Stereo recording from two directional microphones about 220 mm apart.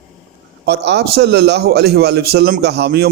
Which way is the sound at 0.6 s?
50° right (ahead or behind).